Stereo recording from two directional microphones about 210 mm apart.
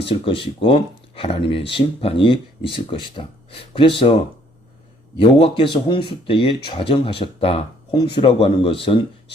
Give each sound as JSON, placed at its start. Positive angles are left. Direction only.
{"t": 0.0, "sound": "speech", "side_deg": 25}